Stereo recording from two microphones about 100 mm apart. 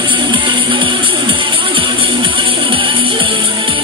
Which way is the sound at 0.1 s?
55° right (ahead or behind).